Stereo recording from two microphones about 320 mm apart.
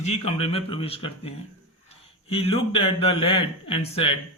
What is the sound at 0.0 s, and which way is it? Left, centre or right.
Speech, centre.